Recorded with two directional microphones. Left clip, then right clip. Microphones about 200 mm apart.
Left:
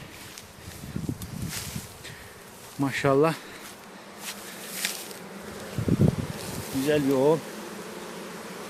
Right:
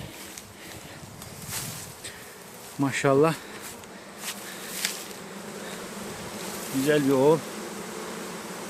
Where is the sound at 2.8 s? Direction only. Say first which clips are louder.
Right 1 dB; 10° left (ahead or behind).